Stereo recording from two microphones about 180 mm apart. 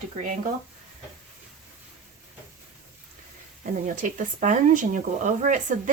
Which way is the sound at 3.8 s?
45° right (ahead or behind).